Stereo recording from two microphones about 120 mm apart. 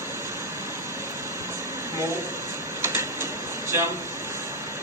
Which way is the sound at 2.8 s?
20° right (ahead or behind).